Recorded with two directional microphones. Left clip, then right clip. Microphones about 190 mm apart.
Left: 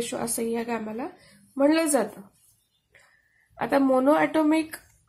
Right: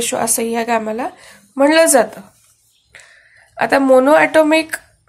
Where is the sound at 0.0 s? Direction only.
15° right (ahead or behind).